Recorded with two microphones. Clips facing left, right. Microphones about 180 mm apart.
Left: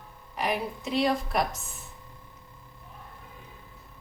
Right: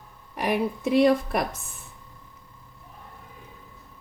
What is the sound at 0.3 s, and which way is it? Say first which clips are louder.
A woman's voice: right 5 dB; 55° right (ahead or behind).